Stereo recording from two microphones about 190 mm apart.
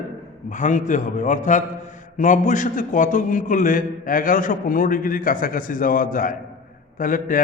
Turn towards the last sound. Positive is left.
turn(degrees=45)  # may be behind; listen again after turning